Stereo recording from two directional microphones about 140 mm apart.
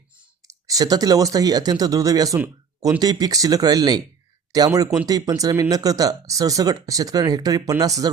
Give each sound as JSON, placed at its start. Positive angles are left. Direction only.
{"t": 0.4, "sound": "speech", "side_deg": -25}